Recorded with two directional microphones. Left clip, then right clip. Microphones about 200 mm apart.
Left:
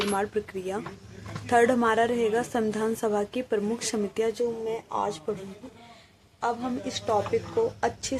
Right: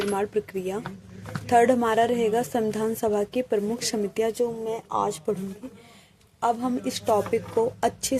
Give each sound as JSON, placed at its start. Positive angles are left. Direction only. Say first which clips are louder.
{"t": 0.1, "sound": "a woman's voice", "louder": "right 2 dB", "side_deg": -35}
{"t": 6.4, "sound": "a woman's voice", "louder": "right 4 dB", "side_deg": -50}